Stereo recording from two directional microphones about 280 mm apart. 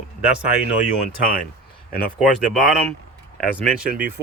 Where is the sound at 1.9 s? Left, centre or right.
Left.